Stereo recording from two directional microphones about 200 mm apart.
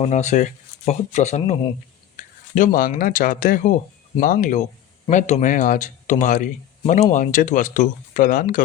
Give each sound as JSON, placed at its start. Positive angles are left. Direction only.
{"t": 0.0, "sound": "speech", "side_deg": 35}
{"t": 2.1, "sound": "speech", "side_deg": 40}